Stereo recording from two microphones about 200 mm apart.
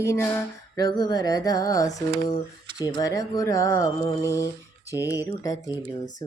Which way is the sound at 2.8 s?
20° left (ahead or behind).